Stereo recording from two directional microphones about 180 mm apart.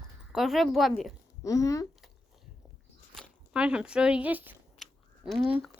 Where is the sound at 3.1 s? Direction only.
Centre (ahead or behind).